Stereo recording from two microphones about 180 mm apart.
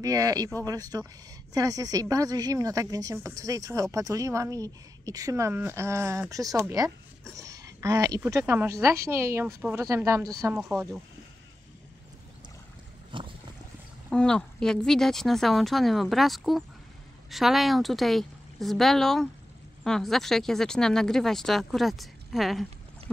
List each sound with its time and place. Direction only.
0.0 s a woman's voice: 20° right (ahead or behind)
7.3 s a sound: 20° right (ahead or behind)
8.3 s a woman's voice: 15° right (ahead or behind)
13.1 s boat: 25° right (ahead or behind)
14.1 s speech: 5° left (ahead or behind)